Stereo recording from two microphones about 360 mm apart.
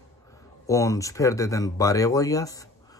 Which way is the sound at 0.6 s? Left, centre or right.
Centre.